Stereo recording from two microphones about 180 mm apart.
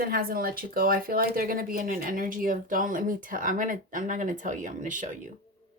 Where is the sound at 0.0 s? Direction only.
55° right (ahead or behind).